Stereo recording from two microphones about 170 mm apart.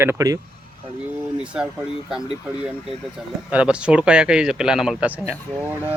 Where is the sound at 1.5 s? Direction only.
5° right (ahead or behind).